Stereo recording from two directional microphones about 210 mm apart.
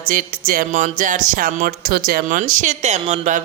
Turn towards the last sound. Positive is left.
turn(degrees=-35)  # may be behind; listen again after turning